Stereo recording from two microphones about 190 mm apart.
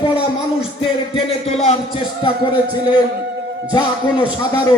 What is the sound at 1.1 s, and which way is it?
A man's voice, 35° left (ahead or behind).